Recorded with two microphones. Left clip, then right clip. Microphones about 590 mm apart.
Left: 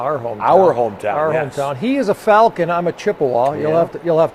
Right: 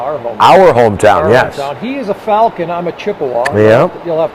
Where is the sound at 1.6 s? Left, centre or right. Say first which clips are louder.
Even; left.